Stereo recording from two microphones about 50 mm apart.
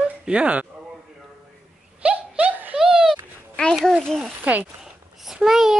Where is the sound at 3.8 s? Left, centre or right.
Centre.